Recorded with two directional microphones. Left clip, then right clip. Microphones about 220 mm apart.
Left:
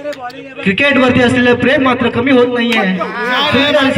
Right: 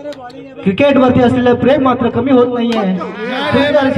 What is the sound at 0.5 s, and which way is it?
A man's voice, 40° right (ahead or behind).